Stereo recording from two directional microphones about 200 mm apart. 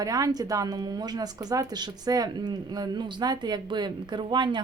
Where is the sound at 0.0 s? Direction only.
20° right (ahead or behind).